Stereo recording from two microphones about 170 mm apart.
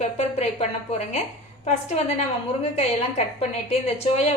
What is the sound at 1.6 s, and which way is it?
A woman's voice, 40° left (ahead or behind).